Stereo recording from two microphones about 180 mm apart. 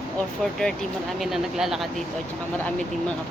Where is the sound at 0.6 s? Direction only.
5° left (ahead or behind).